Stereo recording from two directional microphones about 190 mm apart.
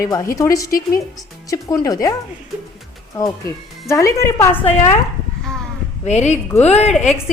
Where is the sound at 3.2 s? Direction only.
15° left (ahead or behind).